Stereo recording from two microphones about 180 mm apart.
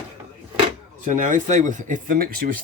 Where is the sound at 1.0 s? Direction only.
45° right (ahead or behind).